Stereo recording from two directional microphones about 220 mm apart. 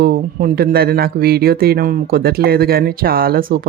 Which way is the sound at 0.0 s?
40° right (ahead or behind).